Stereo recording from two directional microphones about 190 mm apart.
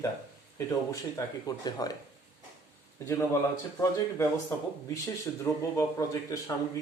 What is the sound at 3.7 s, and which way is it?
A man's voice, 15° left (ahead or behind).